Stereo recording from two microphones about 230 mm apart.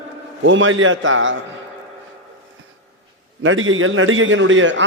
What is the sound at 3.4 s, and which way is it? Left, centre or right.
A man's voice, right.